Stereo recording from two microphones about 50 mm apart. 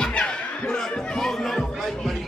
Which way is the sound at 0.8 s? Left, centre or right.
Centre.